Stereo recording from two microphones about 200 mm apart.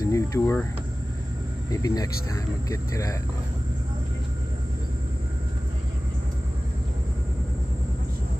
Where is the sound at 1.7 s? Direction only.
15° left (ahead or behind).